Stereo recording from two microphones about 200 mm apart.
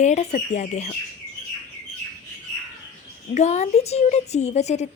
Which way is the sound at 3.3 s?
35° left (ahead or behind).